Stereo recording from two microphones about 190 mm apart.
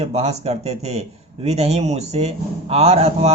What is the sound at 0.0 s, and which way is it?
A man's voice, 35° right (ahead or behind).